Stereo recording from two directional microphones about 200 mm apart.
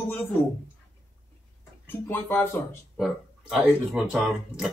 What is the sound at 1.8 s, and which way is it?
Speech, 10° left (ahead or behind).